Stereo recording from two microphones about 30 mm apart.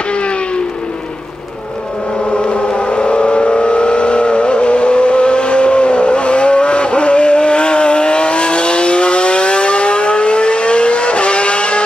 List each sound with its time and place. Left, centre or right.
2.5 s vehicle: left